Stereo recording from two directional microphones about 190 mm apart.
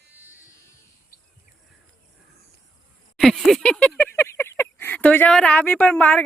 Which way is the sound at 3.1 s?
Centre (ahead or behind).